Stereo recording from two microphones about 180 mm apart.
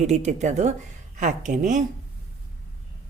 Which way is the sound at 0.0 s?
40° right (ahead or behind).